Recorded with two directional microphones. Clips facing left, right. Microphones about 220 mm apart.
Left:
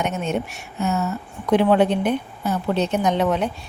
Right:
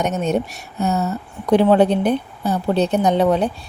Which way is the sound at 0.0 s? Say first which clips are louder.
Right 4 dB; 40° right (ahead or behind).